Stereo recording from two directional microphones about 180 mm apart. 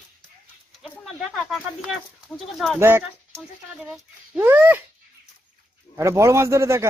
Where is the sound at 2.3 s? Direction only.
Centre (ahead or behind).